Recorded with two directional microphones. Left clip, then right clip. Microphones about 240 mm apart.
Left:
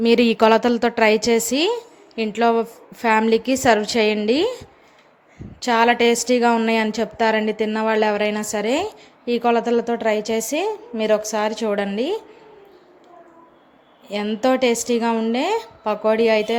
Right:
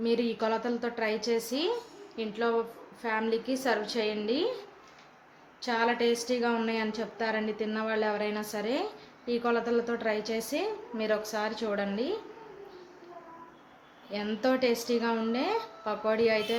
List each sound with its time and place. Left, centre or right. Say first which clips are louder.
0.0 s a woman's voice: left 14 dB; left
5.6 s a woman's voice: left 12 dB; left
14.1 s a woman's voice: left 10 dB; left